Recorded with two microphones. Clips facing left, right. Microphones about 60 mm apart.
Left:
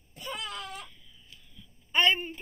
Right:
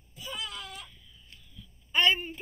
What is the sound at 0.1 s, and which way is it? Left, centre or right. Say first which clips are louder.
Wail: left 2 dB; left.